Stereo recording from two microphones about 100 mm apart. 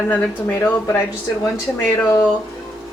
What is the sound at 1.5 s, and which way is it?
Speech, 25° left (ahead or behind).